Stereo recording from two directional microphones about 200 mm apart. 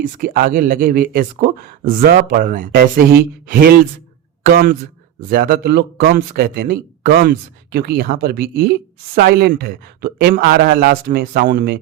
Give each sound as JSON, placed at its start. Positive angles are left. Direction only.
{"t": 0.0, "sound": "speech", "side_deg": -45}